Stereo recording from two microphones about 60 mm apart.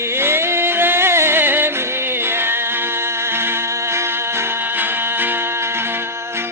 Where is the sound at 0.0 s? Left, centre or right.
Right.